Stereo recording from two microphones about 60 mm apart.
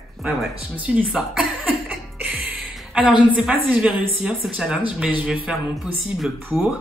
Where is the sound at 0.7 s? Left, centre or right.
Right.